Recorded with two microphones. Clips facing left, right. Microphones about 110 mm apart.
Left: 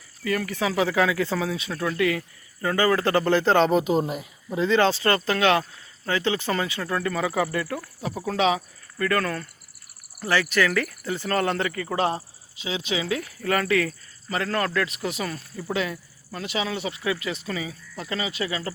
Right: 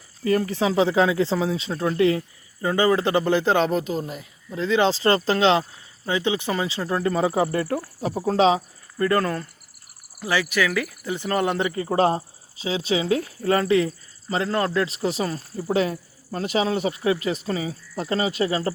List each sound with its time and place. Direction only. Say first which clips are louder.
0.3 s speech: right 4 dB; 30° right (ahead or behind); by 3.7 s 10° right (ahead or behind)
3.8 s speech: left 5 dB; 15° left (ahead or behind)
4.9 s speech: right 3 dB; 25° right (ahead or behind)
10.2 s a man's voice: even; 10° right (ahead or behind); by 18.7 s 40° right (ahead or behind)